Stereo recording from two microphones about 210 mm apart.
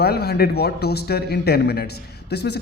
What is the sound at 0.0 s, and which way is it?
A man's voice, 50° left (ahead or behind).